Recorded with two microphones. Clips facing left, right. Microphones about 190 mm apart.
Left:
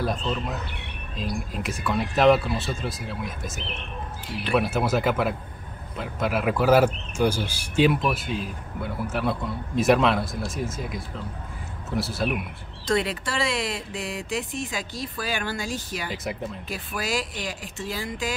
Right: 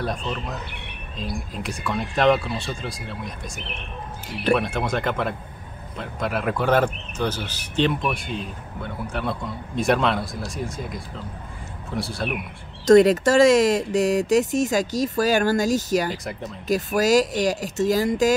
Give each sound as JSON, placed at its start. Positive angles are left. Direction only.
{"t": 0.0, "sound": "speech", "side_deg": 0}
{"t": 12.8, "sound": "speech", "side_deg": -45}